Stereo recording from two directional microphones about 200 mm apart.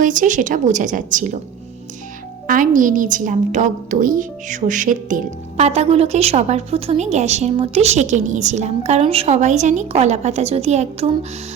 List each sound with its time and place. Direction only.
0.0 s a woman's voice: 40° right (ahead or behind)
2.5 s a woman's voice: 40° right (ahead or behind)